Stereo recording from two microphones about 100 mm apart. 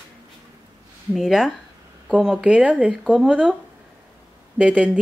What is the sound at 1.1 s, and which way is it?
Speech, 5° right (ahead or behind).